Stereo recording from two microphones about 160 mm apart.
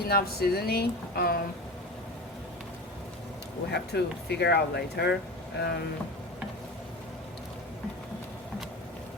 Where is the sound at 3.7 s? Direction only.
90° left.